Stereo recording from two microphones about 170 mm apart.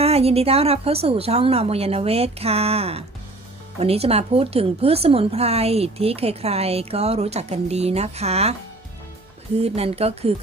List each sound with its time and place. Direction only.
0.0 s speech: 35° right (ahead or behind)
9.6 s speech: 35° right (ahead or behind)